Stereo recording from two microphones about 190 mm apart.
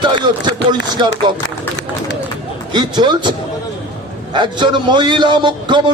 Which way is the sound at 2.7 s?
25° right (ahead or behind).